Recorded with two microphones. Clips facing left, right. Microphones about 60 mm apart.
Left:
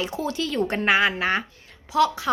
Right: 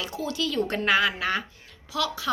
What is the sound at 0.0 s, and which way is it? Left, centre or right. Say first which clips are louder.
A woman's voice: left 3 dB; left.